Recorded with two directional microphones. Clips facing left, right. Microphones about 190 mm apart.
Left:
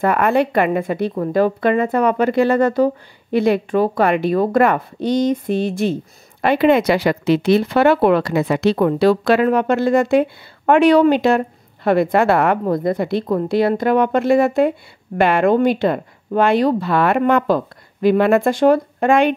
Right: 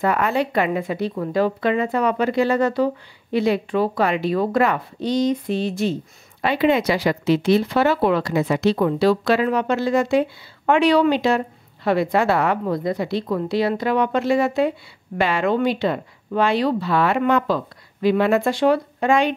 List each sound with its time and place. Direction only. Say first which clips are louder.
0.0 s speech: left 4 dB; 55° left (ahead or behind)